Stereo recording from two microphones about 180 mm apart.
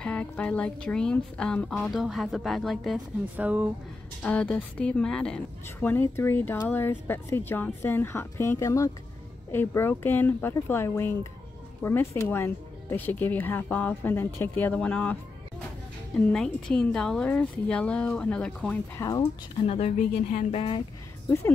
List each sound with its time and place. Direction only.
0.0 s speech: 5° left (ahead or behind)
4.2 s a woman's voice: 5° left (ahead or behind)
16.2 s speech: 5° left (ahead or behind)
18.9 s speech: 20° left (ahead or behind)
19.6 s speech: 35° left (ahead or behind)
21.3 s a woman's voice: 15° left (ahead or behind)